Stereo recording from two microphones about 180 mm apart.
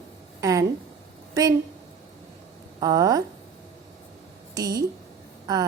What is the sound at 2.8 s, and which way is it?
Speech, 20° right (ahead or behind).